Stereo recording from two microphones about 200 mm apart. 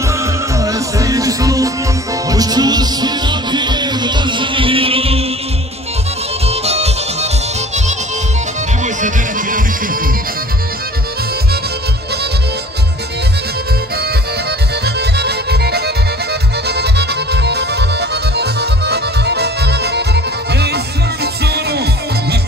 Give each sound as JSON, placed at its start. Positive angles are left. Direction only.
{"t": 0.1, "sound": "music", "side_deg": -15}
{"t": 6.4, "sound": "music", "side_deg": -30}
{"t": 8.8, "sound": "music", "side_deg": -40}
{"t": 15.0, "sound": "music", "side_deg": -55}